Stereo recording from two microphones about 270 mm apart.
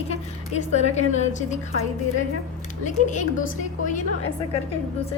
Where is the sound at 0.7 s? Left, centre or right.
Left.